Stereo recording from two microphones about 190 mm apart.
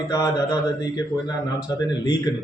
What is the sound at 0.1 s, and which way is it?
A man's voice, 20° left (ahead or behind).